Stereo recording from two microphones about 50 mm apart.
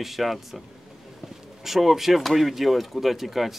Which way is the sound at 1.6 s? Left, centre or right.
Centre.